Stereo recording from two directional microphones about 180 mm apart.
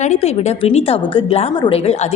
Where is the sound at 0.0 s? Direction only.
35° left (ahead or behind).